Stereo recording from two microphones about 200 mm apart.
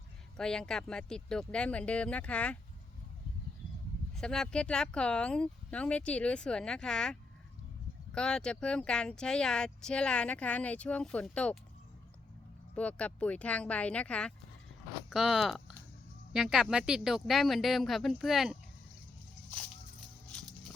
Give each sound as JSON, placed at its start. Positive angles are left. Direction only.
{"t": 0.3, "sound": "speech", "side_deg": 5}
{"t": 4.1, "sound": "speech", "side_deg": 5}
{"t": 12.7, "sound": "speech", "side_deg": 5}